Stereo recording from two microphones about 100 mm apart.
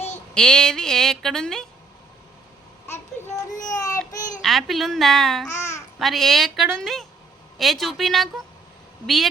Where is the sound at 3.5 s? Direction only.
35° left (ahead or behind).